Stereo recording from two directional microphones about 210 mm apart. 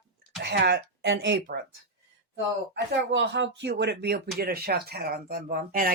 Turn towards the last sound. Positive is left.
turn(degrees=-45)  # may be behind; listen again after turning